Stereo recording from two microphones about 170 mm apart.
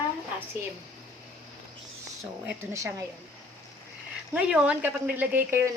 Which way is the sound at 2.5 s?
15° right (ahead or behind).